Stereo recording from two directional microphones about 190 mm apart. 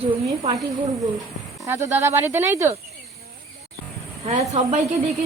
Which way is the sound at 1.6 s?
15° right (ahead or behind).